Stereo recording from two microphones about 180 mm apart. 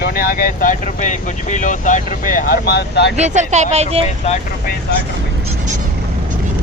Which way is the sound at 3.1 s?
40° right (ahead or behind).